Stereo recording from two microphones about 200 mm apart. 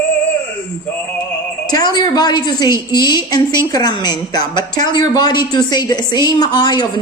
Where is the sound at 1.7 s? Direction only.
20° left (ahead or behind).